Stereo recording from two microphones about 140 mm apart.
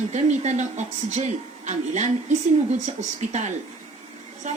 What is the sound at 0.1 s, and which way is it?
Speech, 55° right (ahead or behind).